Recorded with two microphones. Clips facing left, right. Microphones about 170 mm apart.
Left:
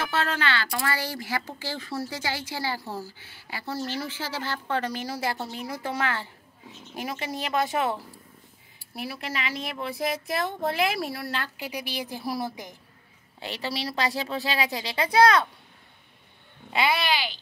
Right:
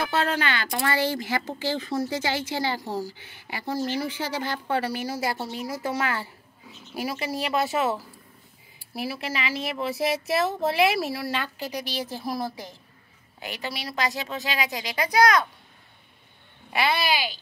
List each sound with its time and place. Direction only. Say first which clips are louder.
0.0 s a woman's voice: right 2 dB; 20° right (ahead or behind); by 11.5 s centre (ahead or behind)
11.8 s a woman's voice: right 2 dB; 10° left (ahead or behind)
13.4 s a woman's voice: left 2 dB; 30° left (ahead or behind)
17.1 s a woman's voice: right 1 dB; 10° right (ahead or behind)